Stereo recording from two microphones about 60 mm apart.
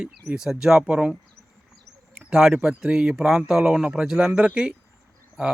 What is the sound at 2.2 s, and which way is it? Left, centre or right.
Speech, centre.